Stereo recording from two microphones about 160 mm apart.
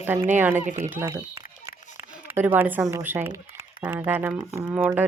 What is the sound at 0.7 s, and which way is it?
Speech, 50° right (ahead or behind).